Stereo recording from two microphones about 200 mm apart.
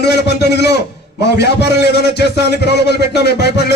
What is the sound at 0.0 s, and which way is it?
A man's voice, 55° left (ahead or behind).